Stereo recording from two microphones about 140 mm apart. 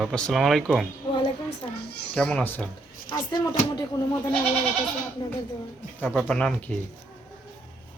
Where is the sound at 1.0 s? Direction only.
30° left (ahead or behind).